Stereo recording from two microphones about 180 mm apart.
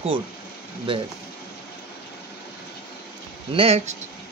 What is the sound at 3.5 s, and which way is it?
Speech, 35° right (ahead or behind).